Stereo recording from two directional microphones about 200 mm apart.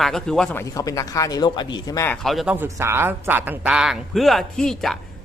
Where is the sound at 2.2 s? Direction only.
Centre (ahead or behind).